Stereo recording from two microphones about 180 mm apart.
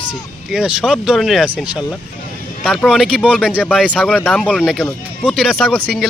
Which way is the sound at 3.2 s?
10° left (ahead or behind).